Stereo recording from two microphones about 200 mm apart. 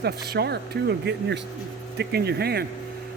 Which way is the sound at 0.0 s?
55° right (ahead or behind).